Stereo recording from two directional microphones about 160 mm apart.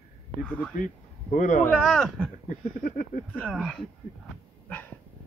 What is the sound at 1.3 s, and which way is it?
Speech, 55° left (ahead or behind).